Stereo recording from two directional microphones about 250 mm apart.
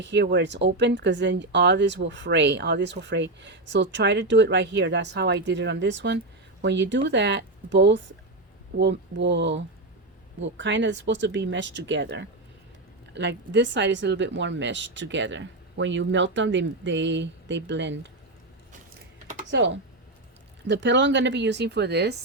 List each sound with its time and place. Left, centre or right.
0.0 s speech: right
19.5 s speech: right